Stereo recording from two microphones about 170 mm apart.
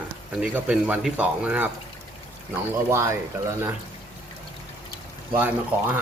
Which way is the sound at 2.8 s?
15° right (ahead or behind).